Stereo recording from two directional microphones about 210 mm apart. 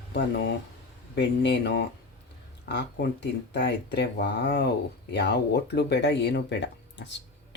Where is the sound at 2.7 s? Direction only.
55° left (ahead or behind).